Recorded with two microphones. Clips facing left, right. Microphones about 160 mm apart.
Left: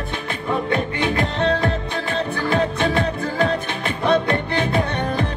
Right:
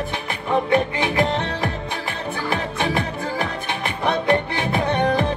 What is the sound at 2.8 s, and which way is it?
Music, 15° right (ahead or behind).